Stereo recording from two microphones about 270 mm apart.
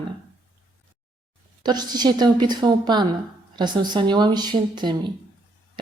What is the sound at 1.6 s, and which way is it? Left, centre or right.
A woman's voice, centre.